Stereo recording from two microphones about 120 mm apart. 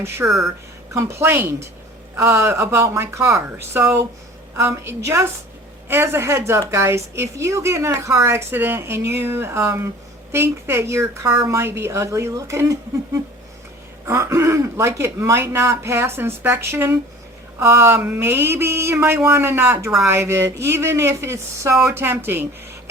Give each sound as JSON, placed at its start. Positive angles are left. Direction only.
{"t": 0.2, "sound": "a woman's voice", "side_deg": -20}
{"t": 14.0, "sound": "a woman's voice", "side_deg": -20}